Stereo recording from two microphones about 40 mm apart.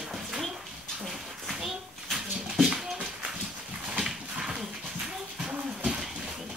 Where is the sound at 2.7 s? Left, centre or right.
Right.